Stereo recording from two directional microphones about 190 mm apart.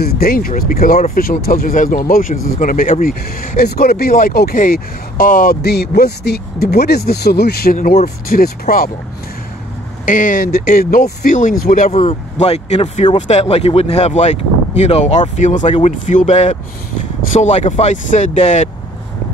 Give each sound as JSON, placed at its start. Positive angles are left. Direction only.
{"t": 0.2, "sound": "speech", "side_deg": 50}
{"t": 10.0, "sound": "speech", "side_deg": 45}
{"t": 11.9, "sound": "speech", "side_deg": 35}